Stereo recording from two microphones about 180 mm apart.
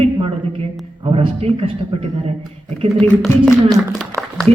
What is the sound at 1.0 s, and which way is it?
Speech, 30° right (ahead or behind).